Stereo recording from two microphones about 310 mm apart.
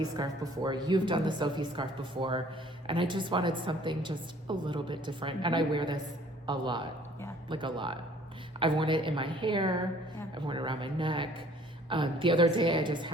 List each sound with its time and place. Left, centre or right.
0.0 s a woman's voice: centre